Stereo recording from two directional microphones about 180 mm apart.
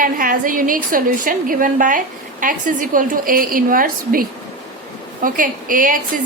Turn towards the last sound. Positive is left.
turn(degrees=-50)  # may be behind; listen again after turning